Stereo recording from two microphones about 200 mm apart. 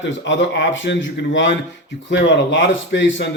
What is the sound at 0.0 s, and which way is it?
A man's voice, 65° left (ahead or behind).